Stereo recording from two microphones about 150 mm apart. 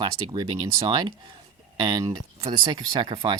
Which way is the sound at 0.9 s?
30° right (ahead or behind).